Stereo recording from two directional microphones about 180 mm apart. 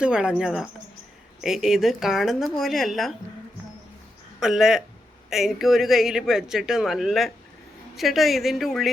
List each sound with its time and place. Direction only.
0.0 s speech: 5° right (ahead or behind)
4.4 s speech: 5° right (ahead or behind)